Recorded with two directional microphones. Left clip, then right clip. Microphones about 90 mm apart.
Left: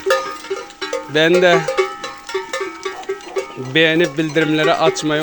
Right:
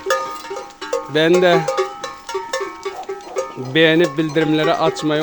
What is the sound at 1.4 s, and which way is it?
Music, 30° right (ahead or behind).